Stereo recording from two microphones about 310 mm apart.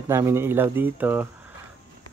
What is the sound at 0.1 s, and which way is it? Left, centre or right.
Speech, centre.